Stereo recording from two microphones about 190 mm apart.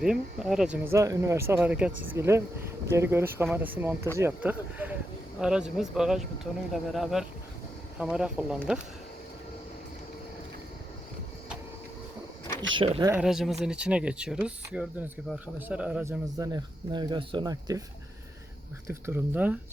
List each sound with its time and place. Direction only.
0.0 s speech: 5° right (ahead or behind)
12.8 s speech: 30° right (ahead or behind)
13.1 s speech: 5° right (ahead or behind); by 17.8 s 20° right (ahead or behind)
18.9 s speech: 10° right (ahead or behind)